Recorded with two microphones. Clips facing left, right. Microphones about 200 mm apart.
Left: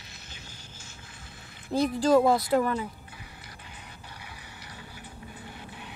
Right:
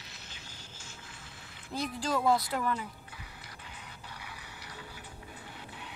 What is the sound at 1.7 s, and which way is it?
Speech, 45° left (ahead or behind).